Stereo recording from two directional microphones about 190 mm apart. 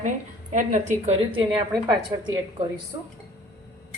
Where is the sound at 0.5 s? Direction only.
40° right (ahead or behind).